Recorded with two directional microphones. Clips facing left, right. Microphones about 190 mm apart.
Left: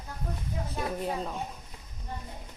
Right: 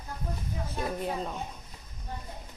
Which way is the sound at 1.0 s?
Centre (ahead or behind).